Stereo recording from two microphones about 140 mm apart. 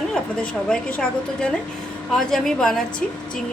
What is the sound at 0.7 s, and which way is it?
A woman's voice, 10° left (ahead or behind).